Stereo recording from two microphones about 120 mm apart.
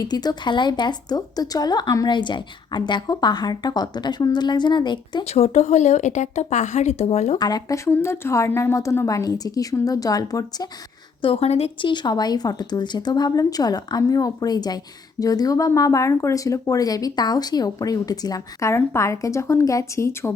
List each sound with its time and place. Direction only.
0.0 s speech: 35° left (ahead or behind)
5.2 s speech: 65° left (ahead or behind)
7.3 s speech: 35° left (ahead or behind)
7.9 s speech: 20° left (ahead or behind)
11.2 s a woman's voice: 55° left (ahead or behind)
11.8 s speech: 40° left (ahead or behind); by 20.3 s 25° left (ahead or behind)